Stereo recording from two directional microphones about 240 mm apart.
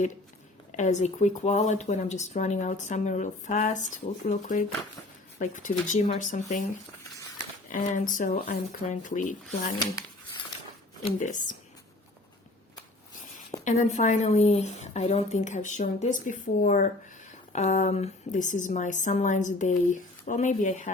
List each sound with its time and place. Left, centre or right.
0.8 s a woman's voice: left
7.7 s a woman's voice: left
11.2 s a woman's voice: left
13.7 s a woman's voice: left